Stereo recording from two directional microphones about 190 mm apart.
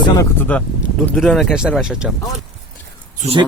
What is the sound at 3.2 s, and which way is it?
Speech, 30° right (ahead or behind).